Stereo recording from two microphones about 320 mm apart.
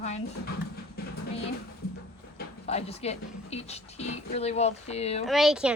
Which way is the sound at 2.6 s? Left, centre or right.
Centre.